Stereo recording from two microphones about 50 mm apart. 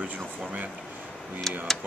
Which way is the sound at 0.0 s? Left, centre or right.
Right.